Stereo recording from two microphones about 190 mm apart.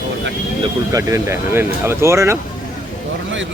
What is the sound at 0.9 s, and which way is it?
Speech, 15° right (ahead or behind).